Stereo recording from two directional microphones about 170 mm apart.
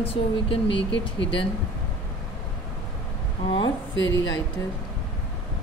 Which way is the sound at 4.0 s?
90° left.